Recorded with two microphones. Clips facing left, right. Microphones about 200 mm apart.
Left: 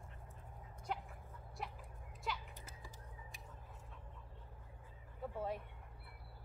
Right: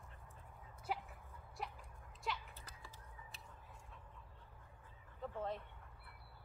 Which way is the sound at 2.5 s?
15° left (ahead or behind).